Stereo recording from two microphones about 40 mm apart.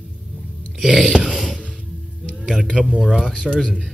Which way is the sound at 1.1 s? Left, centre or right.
Centre.